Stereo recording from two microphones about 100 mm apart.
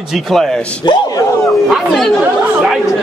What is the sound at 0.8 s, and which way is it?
Speech, 50° left (ahead or behind).